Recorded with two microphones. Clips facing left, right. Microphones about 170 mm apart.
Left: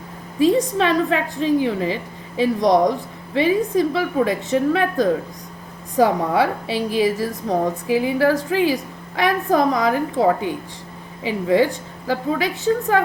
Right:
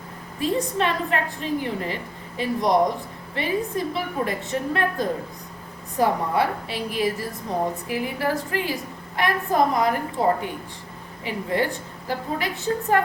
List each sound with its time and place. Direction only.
0.3 s a woman's voice: 90° left